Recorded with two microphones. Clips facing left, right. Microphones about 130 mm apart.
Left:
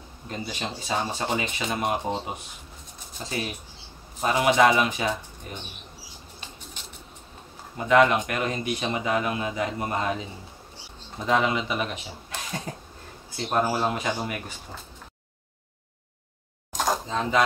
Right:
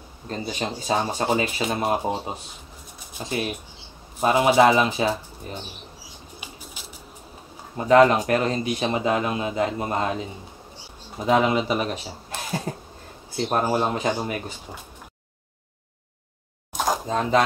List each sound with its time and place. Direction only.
0.3 s speech: 35° right (ahead or behind)
3.2 s speech: 20° right (ahead or behind)
4.2 s speech: 35° right (ahead or behind)
6.4 s a sound: 5° right (ahead or behind)
7.7 s speech: 35° right (ahead or behind)
11.1 s speech: 30° right (ahead or behind)
16.7 s a sound: 5° right (ahead or behind)
17.1 s speech: 40° right (ahead or behind)